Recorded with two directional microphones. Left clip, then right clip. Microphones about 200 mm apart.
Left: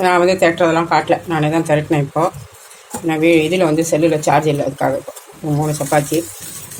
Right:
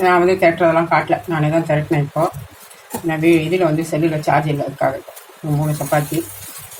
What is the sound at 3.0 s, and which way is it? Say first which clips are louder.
Speech: left 2 dB; 40° left (ahead or behind).